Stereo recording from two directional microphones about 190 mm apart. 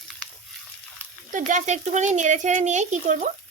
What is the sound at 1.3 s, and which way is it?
Speech, 40° right (ahead or behind).